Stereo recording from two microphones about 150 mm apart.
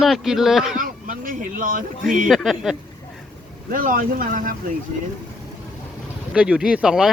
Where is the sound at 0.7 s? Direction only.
65° right (ahead or behind).